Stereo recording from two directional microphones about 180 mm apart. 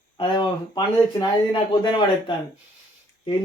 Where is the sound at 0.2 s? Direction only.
25° left (ahead or behind).